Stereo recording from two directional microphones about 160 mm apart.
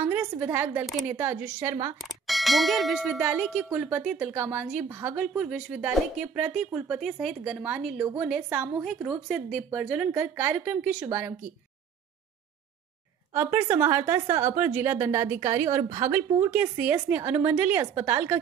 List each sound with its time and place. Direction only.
0.0 s a woman's voice: 15° right (ahead or behind)
0.8 s speech: centre (ahead or behind)
1.1 s speech: 15° right (ahead or behind)
2.0 s speech: centre (ahead or behind)
13.3 s speech: 15° right (ahead or behind)